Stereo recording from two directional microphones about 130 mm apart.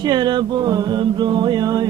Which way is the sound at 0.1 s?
35° right (ahead or behind).